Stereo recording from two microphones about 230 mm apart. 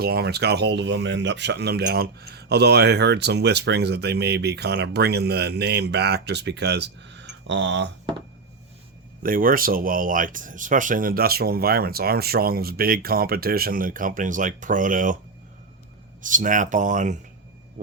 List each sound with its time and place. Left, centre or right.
0.0 s speech: right
9.2 s speech: right
16.2 s speech: right